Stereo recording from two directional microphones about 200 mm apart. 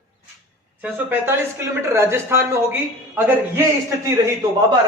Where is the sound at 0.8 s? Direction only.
10° right (ahead or behind).